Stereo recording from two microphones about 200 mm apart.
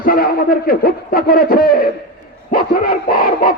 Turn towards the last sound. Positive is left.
turn(degrees=45)  # may be behind; listen again after turning